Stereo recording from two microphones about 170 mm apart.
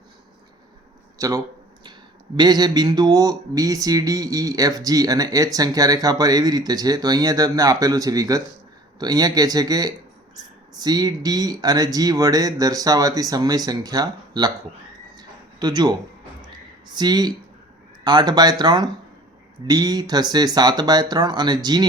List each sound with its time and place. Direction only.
1.2 s speech: 20° right (ahead or behind)
15.1 s a sound: 25° right (ahead or behind)
16.9 s speech: 25° right (ahead or behind)